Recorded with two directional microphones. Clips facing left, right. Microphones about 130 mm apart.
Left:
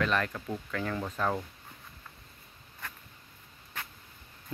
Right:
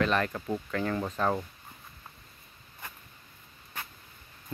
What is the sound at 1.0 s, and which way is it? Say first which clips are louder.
Speech: right 1 dB; 25° right (ahead or behind).